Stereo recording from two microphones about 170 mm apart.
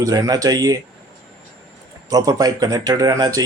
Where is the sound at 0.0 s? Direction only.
20° right (ahead or behind).